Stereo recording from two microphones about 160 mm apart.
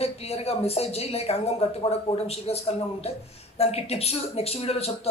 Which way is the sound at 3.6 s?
40° left (ahead or behind).